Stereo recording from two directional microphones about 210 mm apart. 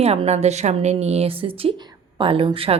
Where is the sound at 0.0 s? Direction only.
30° right (ahead or behind).